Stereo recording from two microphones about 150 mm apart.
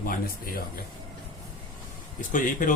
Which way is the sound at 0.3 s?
80° left.